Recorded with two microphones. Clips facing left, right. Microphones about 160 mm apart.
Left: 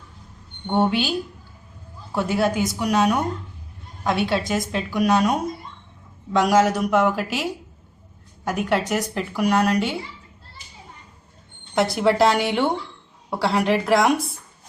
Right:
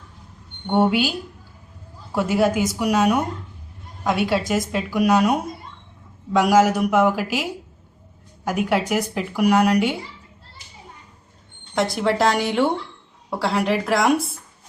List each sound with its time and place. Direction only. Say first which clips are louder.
0.7 s a woman's voice: right 2 dB; 10° right (ahead or behind)
2.1 s a woman's voice: right 2 dB; 5° right (ahead or behind)
8.4 s a woman's voice: right 1 dB; 10° right (ahead or behind)
11.7 s a woman's voice: left 2 dB; centre (ahead or behind)